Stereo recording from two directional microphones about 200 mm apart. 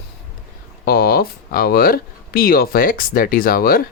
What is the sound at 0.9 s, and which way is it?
Speech, 50° left (ahead or behind).